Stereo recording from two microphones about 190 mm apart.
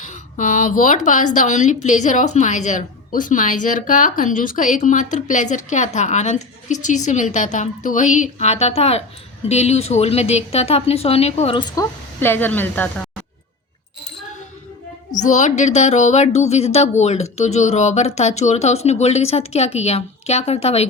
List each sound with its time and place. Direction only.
0.0 s a woman's voice: 40° left (ahead or behind); by 13.1 s 10° left (ahead or behind)
15.2 s a woman's voice: 40° left (ahead or behind)